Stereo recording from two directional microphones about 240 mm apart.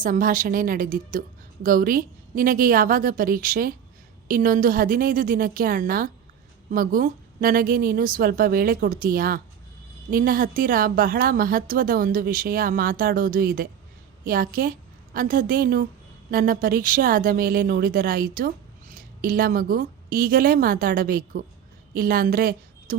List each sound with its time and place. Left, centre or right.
0.0 s a woman's voice: right